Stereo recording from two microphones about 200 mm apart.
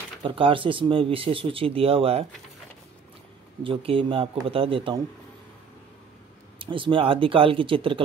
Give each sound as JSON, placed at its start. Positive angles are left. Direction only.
{"t": 0.2, "sound": "speech", "side_deg": -25}
{"t": 3.6, "sound": "speech", "side_deg": -25}
{"t": 6.6, "sound": "speech", "side_deg": -25}